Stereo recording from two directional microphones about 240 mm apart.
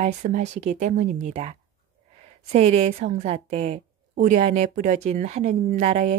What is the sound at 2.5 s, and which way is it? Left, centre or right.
A woman's voice, right.